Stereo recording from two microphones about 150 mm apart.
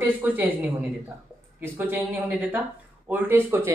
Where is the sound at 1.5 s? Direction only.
10° right (ahead or behind).